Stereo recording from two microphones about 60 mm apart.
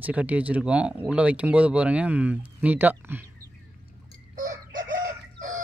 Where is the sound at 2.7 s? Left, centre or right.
Right.